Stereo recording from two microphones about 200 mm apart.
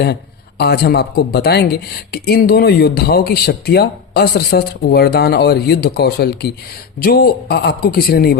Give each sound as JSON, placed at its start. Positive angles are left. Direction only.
{"t": 0.6, "sound": "speech", "side_deg": 55}